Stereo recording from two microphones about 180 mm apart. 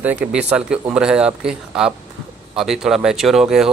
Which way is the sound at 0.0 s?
10° right (ahead or behind).